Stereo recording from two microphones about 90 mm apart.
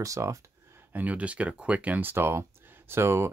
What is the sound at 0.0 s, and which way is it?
Speech, 35° right (ahead or behind).